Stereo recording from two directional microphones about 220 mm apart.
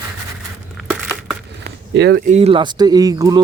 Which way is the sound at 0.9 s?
5° right (ahead or behind).